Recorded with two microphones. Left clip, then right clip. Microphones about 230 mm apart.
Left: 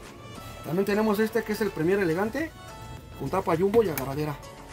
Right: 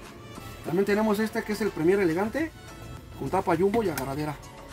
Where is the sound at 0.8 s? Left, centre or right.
Centre.